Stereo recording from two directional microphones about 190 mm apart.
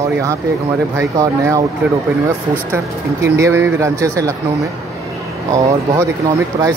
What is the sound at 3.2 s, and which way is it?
Speech, 15° right (ahead or behind).